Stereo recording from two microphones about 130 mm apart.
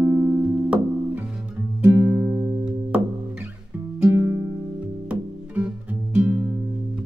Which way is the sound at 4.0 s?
15° right (ahead or behind).